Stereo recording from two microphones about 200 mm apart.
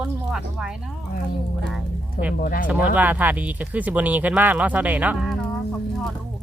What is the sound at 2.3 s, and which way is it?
Speech, 45° left (ahead or behind).